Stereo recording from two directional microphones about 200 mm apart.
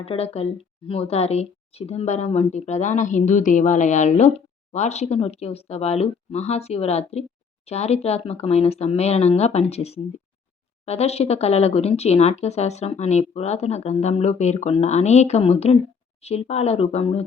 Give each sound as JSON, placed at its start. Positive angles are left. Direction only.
{"t": 0.0, "sound": "a woman's voice", "side_deg": 30}